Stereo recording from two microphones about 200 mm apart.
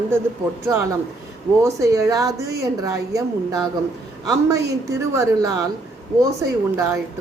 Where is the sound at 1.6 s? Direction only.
15° right (ahead or behind).